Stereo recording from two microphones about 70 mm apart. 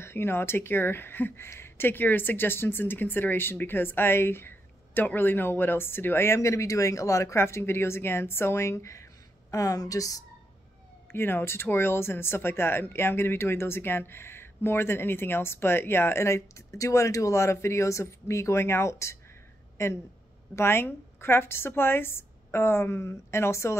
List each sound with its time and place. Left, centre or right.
0.0 s speech: left
11.1 s speech: left